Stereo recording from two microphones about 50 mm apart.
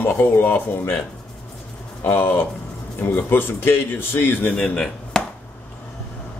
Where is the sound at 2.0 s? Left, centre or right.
Left.